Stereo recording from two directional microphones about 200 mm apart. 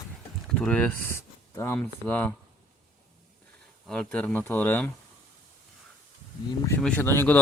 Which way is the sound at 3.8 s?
5° left (ahead or behind).